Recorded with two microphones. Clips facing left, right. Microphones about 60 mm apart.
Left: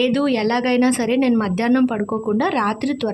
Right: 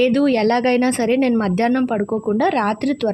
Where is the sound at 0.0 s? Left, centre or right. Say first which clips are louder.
Right 3 dB; right.